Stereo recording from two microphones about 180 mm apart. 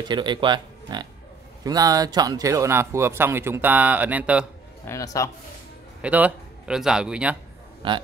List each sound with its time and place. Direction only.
0.1 s speech: 25° right (ahead or behind); by 4.5 s 10° right (ahead or behind)
4.8 s a man's voice: 20° left (ahead or behind)
6.0 s a man's voice: 10° right (ahead or behind)
7.8 s speech: 30° right (ahead or behind)